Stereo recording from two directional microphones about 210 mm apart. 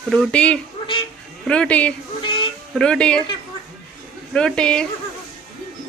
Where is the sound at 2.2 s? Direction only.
20° left (ahead or behind).